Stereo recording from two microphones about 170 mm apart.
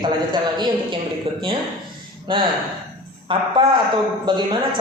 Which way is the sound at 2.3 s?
30° right (ahead or behind).